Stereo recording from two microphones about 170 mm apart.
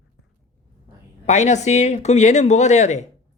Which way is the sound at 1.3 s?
40° left (ahead or behind).